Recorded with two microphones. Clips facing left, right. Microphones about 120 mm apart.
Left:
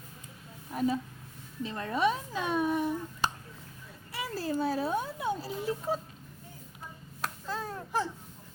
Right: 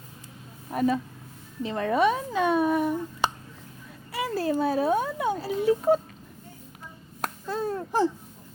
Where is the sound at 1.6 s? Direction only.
85° right; by 6.0 s 65° right (ahead or behind).